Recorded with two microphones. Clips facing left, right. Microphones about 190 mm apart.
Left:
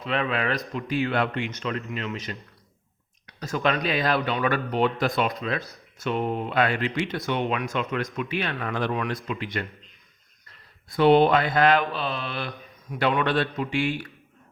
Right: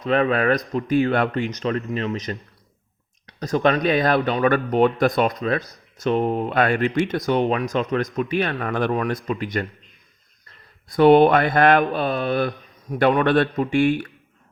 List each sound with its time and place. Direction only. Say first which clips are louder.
0.0 s speech: right 7 dB; 45° right (ahead or behind)
3.4 s speech: right 6 dB; 40° right (ahead or behind)
10.9 s speech: right 5 dB; 50° right (ahead or behind)